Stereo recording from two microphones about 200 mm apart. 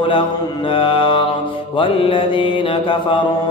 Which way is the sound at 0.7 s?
25° left (ahead or behind).